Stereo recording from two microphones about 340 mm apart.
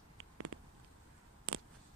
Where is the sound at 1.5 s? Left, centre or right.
Right.